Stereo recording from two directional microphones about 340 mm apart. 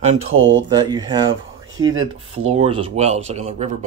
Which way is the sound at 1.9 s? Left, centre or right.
Right.